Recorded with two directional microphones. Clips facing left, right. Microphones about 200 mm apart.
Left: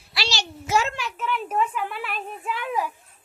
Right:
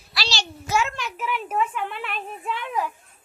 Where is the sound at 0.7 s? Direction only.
35° left (ahead or behind).